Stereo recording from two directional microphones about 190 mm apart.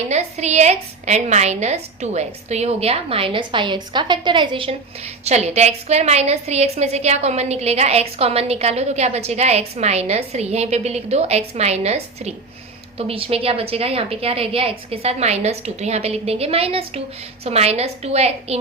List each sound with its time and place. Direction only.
0.1 s a woman's voice: 35° right (ahead or behind)